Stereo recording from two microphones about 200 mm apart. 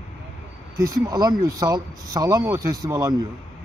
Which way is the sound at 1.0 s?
20° right (ahead or behind).